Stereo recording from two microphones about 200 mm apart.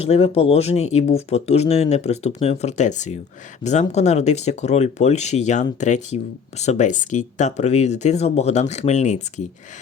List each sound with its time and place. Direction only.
0.0 s speech: 30° left (ahead or behind)